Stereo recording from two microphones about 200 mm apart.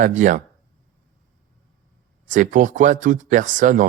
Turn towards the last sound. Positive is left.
turn(degrees=-40)  # may be behind; listen again after turning